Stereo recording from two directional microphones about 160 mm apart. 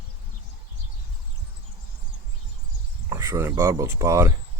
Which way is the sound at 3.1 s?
20° right (ahead or behind).